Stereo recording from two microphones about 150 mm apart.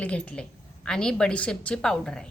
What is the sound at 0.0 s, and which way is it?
A woman's voice, 10° left (ahead or behind).